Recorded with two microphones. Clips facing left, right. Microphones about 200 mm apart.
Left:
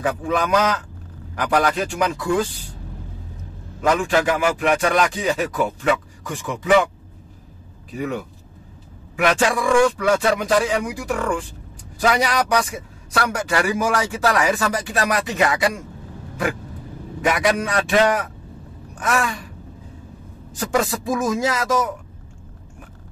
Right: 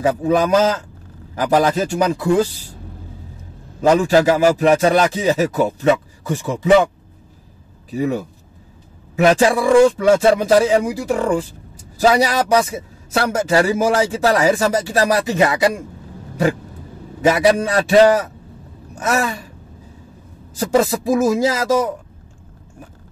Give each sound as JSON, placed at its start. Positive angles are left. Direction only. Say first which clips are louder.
{"t": 0.3, "sound": "a man's voice", "louder": "right 5 dB", "side_deg": -30}
{"t": 3.9, "sound": "speech", "louder": "right 6 dB", "side_deg": -35}
{"t": 7.9, "sound": "a man's voice", "louder": "right 6 dB", "side_deg": -30}
{"t": 17.2, "sound": "speech", "louder": "right 6 dB", "side_deg": -30}
{"t": 20.5, "sound": "a man's voice", "louder": "right 5 dB", "side_deg": -25}